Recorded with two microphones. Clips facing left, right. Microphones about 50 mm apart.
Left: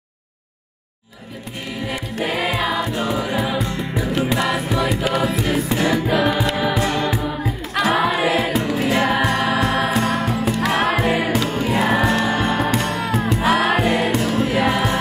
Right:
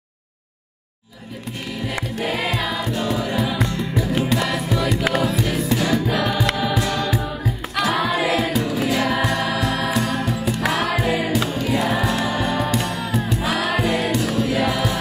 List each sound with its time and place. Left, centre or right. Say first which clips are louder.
2.3 s music: left 5 dB; centre
5.4 s music: left 2 dB; left
7.8 s choir: left 2 dB; left
8.5 s music: left 2 dB; left
11.4 s music: left 2 dB; left